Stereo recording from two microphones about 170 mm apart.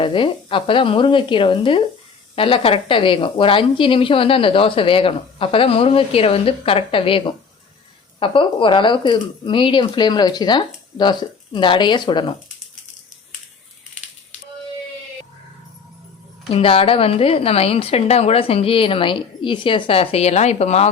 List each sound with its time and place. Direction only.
0.0 s a woman's voice: 30° left (ahead or behind)
16.5 s a woman's voice: 35° left (ahead or behind)